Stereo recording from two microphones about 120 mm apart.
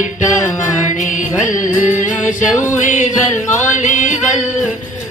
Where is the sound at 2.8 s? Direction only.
90° left.